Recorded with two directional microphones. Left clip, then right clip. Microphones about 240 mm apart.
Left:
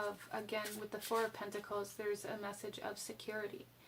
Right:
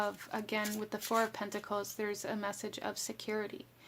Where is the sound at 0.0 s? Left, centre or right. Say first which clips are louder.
Right 5 dB; right.